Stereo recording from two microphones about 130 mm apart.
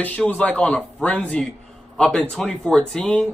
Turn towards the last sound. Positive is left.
turn(degrees=10)  # may be behind; listen again after turning